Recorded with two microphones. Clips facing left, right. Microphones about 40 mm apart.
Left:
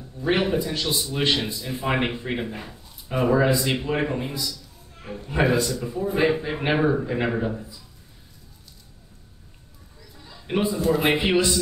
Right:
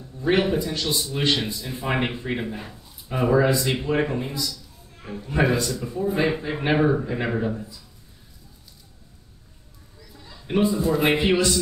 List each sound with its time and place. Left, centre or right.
0.3 s speech: centre
3.4 s speech: centre
3.8 s a man's voice: centre
9.9 s a sound: centre
10.4 s a man's voice: centre
10.9 s a man's voice: centre
11.1 s speech: centre